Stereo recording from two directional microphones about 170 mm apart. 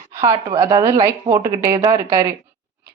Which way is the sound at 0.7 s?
20° right (ahead or behind).